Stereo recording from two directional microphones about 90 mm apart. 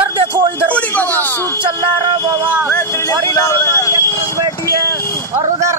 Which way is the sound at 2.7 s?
30° left (ahead or behind).